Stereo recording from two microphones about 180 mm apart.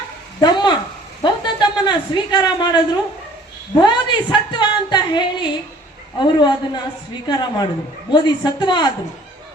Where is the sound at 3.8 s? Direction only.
25° left (ahead or behind).